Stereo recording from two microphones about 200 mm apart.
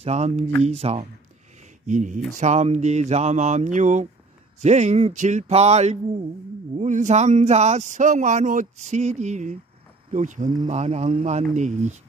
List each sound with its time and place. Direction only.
0.0 s speech: 35° right (ahead or behind)